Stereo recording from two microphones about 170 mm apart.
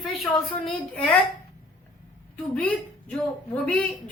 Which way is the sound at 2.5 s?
5° left (ahead or behind).